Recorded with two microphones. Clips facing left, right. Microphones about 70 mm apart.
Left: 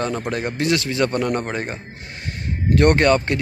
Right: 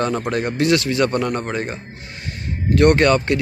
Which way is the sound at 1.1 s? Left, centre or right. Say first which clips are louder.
Right 1 dB; centre.